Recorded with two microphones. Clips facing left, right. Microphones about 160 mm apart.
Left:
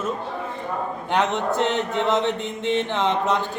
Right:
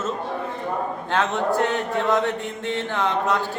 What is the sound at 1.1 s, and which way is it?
Mantra, 20° left (ahead or behind).